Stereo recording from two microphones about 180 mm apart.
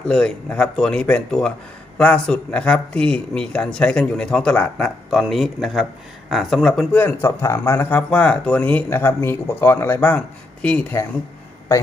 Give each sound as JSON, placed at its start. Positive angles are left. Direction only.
{"t": 0.1, "sound": "speech", "side_deg": 5}